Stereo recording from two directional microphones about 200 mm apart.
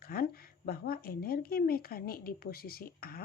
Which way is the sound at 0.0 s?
50° left (ahead or behind).